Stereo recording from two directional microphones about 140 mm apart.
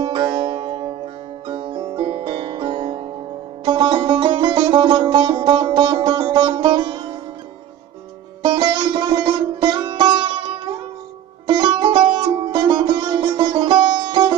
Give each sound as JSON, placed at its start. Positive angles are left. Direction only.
{"t": 0.0, "sound": "music", "side_deg": -35}
{"t": 8.4, "sound": "sitar", "side_deg": -35}
{"t": 11.4, "sound": "music", "side_deg": -35}